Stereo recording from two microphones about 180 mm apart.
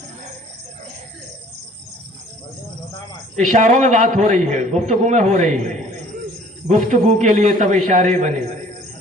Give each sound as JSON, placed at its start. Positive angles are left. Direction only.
{"t": 3.3, "sound": "a man's voice", "side_deg": -45}